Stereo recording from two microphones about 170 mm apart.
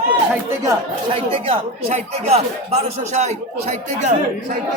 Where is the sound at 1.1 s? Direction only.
35° right (ahead or behind).